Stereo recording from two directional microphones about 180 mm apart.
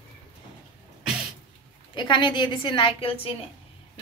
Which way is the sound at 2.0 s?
25° left (ahead or behind).